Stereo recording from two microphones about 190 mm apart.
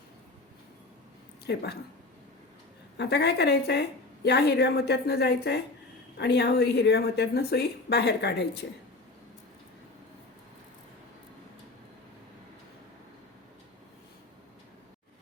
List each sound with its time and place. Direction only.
1.5 s a woman's voice: 60° left (ahead or behind)
3.0 s a woman's voice: 60° left (ahead or behind)